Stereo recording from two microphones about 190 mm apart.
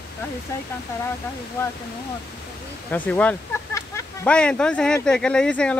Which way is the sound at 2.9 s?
10° left (ahead or behind).